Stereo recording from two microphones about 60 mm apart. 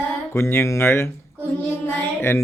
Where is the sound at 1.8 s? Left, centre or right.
Left.